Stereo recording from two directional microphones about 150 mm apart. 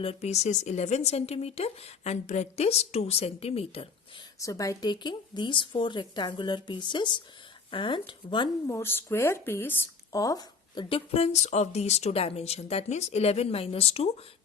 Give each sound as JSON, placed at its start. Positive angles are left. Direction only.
{"t": 0.0, "sound": "speech", "side_deg": 45}
{"t": 4.4, "sound": "speech", "side_deg": 20}
{"t": 8.6, "sound": "speech", "side_deg": 15}